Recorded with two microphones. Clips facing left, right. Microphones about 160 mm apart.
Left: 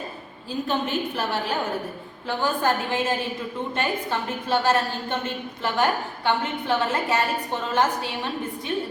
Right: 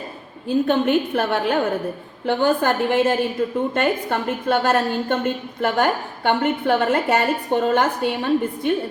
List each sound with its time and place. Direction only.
0.4 s a woman's voice: 60° right (ahead or behind)